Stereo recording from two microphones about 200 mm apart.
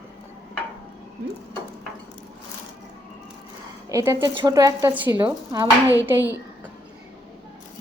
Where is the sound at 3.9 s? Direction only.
15° right (ahead or behind).